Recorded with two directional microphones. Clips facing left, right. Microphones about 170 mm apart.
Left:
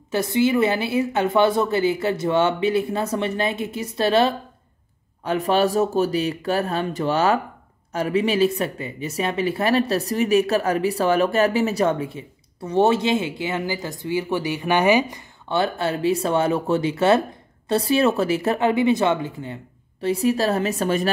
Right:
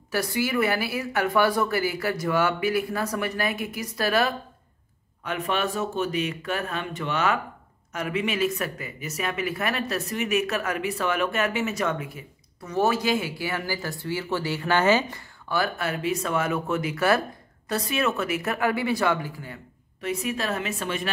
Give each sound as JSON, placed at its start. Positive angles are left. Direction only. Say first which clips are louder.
{"t": 0.1, "sound": "a woman's voice", "louder": "left 6 dB", "side_deg": 20}
{"t": 15.4, "sound": "a woman's voice", "louder": "left 5 dB", "side_deg": 25}